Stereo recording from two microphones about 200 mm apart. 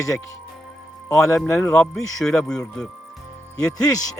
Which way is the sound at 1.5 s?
10° left (ahead or behind).